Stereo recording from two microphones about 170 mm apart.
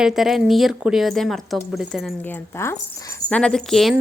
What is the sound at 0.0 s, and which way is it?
A woman's voice, centre (ahead or behind).